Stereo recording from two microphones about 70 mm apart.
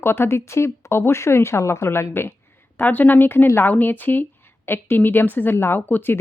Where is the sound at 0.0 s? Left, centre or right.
Left.